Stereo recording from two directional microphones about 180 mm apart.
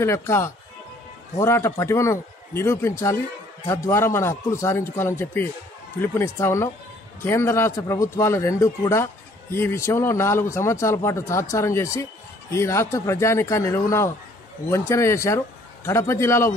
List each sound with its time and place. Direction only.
0.0 s a man's voice: 15° left (ahead or behind)